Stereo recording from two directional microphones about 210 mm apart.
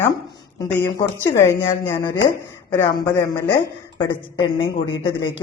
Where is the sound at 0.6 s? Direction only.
10° left (ahead or behind).